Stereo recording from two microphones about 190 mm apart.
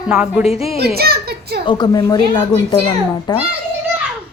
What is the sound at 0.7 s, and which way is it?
Speech, 55° right (ahead or behind).